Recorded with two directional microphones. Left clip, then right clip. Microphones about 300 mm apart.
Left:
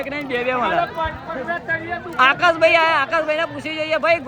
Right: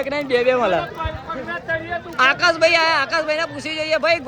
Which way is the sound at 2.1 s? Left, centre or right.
Centre.